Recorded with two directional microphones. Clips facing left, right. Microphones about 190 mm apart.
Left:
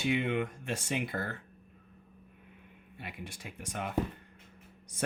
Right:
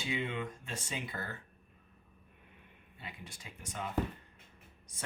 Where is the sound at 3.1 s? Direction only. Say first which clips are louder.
Left 6 dB; 80° left.